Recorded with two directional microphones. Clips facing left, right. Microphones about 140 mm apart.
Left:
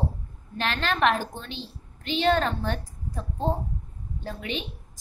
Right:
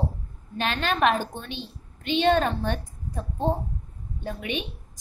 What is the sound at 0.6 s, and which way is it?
A woman's voice, 15° right (ahead or behind).